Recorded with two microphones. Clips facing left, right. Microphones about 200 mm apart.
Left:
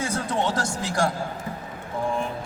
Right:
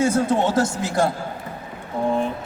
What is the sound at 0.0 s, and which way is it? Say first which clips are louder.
Speech: right 7 dB; 25° right (ahead or behind).